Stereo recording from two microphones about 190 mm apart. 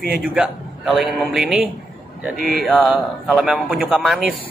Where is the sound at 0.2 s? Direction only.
5° right (ahead or behind).